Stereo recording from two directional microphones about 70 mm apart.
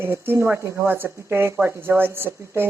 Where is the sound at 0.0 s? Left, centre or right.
Right.